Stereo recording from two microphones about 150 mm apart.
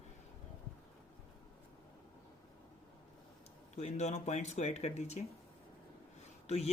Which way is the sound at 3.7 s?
50° left (ahead or behind).